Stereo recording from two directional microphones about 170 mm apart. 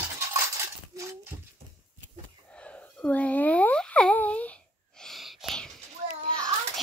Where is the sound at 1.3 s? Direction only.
20° right (ahead or behind).